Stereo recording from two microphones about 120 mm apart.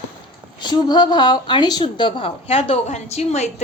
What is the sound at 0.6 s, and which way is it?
A woman's voice, 35° left (ahead or behind).